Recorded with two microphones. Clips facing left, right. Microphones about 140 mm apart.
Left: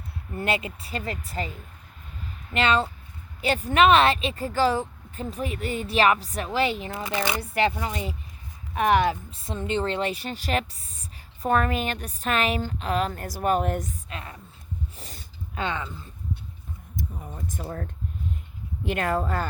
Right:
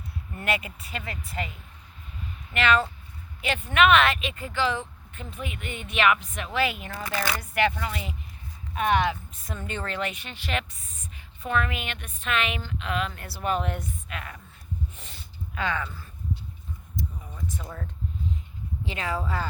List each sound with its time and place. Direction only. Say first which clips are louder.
0.3 s speech: left 2 dB; 30° left (ahead or behind)
7.0 s speech: left 1 dB; 20° left (ahead or behind)
7.5 s speech: even; 30° left (ahead or behind)
9.4 s speech: left 11 dB; 25° left (ahead or behind); by 13.9 s 45° left (ahead or behind)
14.1 s speech: even; 30° left (ahead or behind)
14.9 s a sound: left 1 dB; 35° left (ahead or behind)
17.0 s a sound: left 1 dB; 50° left (ahead or behind)
17.6 s speech: left 5 dB; 50° left (ahead or behind)
18.9 s speech: left 5 dB; 55° left (ahead or behind)